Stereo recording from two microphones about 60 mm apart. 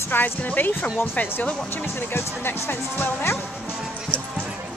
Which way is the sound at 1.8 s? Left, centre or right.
Left.